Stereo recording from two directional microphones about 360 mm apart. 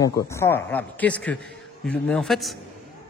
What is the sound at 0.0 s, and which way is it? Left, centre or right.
A man's voice, centre.